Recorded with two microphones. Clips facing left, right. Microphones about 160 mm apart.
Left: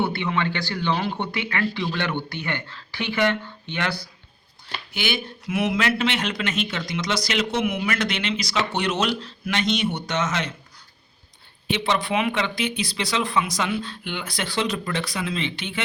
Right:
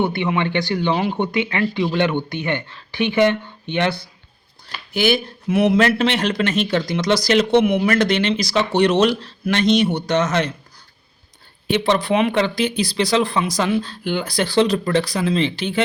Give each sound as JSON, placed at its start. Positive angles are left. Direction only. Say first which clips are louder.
{"t": 0.0, "sound": "speech", "louder": "right 4 dB", "side_deg": -20}
{"t": 4.6, "sound": "speech", "louder": "right 10 dB", "side_deg": -40}
{"t": 11.7, "sound": "speech", "louder": "right 6 dB", "side_deg": -35}